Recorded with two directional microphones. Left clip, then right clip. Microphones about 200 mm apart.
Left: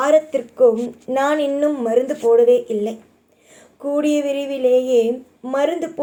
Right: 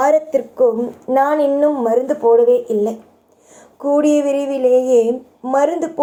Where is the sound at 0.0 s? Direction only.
Centre (ahead or behind).